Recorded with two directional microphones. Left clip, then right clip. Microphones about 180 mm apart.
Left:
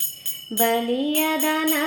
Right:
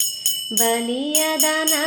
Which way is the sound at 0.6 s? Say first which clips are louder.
Left 2 dB; 30° right (ahead or behind).